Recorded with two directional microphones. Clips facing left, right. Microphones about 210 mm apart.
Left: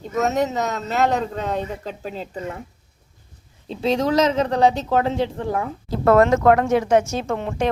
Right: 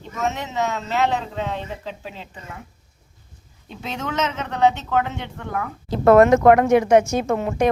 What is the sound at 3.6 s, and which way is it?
Speech, 30° left (ahead or behind).